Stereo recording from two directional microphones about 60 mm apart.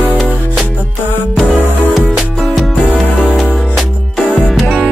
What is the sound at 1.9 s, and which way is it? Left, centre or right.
Music, centre.